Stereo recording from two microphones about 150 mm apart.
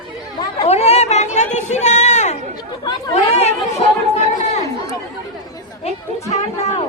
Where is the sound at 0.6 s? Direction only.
45° left (ahead or behind).